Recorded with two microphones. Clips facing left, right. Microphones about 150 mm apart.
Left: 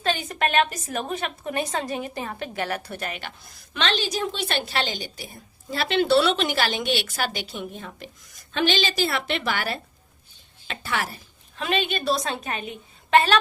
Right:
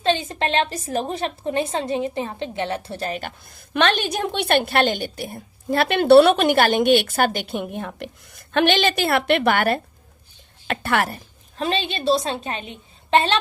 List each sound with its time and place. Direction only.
0.0 s a woman's voice: 25° right (ahead or behind); by 11.2 s 60° right (ahead or behind)
11.5 s a woman's voice: 35° right (ahead or behind)